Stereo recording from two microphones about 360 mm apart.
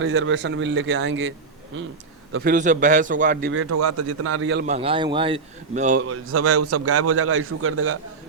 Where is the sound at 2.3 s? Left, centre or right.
Right.